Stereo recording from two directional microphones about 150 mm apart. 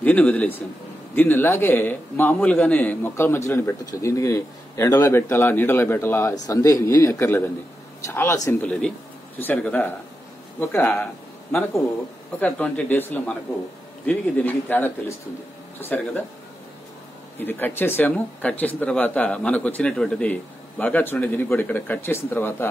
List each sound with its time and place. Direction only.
0.0 s a man's voice: 10° left (ahead or behind)
12.4 s speech: 10° left (ahead or behind)
17.4 s speech: 15° left (ahead or behind)